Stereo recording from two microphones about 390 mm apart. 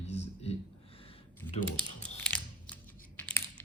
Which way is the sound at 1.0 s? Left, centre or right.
Centre.